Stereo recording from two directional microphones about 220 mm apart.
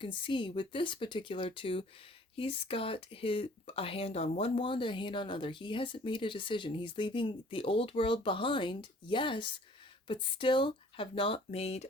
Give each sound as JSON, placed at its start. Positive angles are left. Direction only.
{"t": 0.0, "sound": "speech", "side_deg": 25}